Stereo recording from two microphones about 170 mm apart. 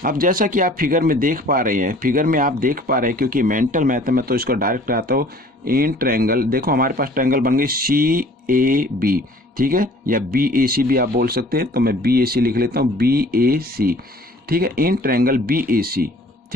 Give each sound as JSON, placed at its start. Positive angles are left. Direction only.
{"t": 0.0, "sound": "speech", "side_deg": -55}